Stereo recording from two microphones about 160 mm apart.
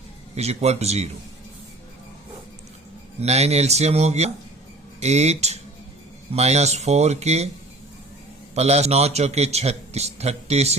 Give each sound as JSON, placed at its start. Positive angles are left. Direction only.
{"t": 0.3, "sound": "speech", "side_deg": -40}
{"t": 3.2, "sound": "a man's voice", "side_deg": -40}
{"t": 8.5, "sound": "a man's voice", "side_deg": -40}